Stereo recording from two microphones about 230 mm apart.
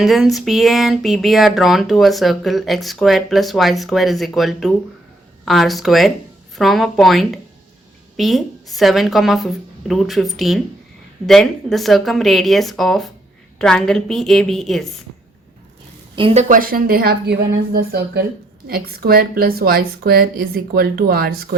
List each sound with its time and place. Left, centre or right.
0.0 s speech: centre
16.1 s a woman's voice: right